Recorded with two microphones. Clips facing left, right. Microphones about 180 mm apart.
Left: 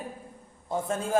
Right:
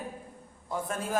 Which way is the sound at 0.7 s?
25° left (ahead or behind).